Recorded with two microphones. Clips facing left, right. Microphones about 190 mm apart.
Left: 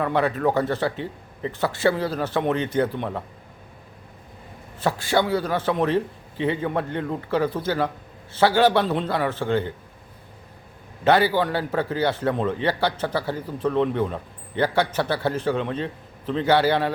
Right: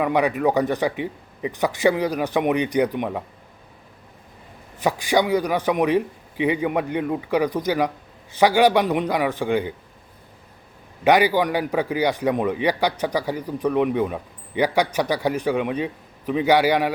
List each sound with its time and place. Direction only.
0.0 s a man's voice: 15° right (ahead or behind)
4.8 s a man's voice: 15° right (ahead or behind)
11.0 s a man's voice: 15° right (ahead or behind)